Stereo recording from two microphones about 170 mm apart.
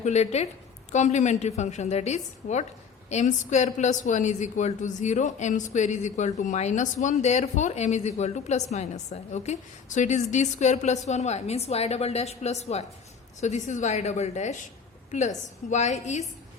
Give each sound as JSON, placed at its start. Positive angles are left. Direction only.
{"t": 0.0, "sound": "a woman's voice", "side_deg": 40}